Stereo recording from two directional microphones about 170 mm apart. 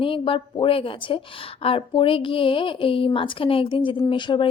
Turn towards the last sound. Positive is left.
turn(degrees=30)  # may be behind; listen again after turning